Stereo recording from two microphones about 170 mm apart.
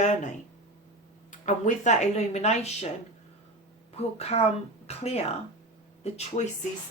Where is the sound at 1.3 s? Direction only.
45° left (ahead or behind).